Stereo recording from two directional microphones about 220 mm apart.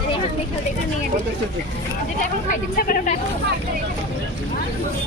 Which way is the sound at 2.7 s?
40° left (ahead or behind).